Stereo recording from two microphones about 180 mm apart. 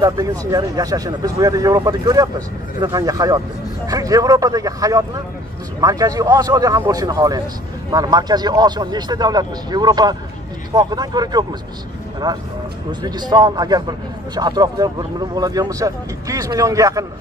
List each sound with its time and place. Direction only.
0.0 s a man's voice: 20° right (ahead or behind)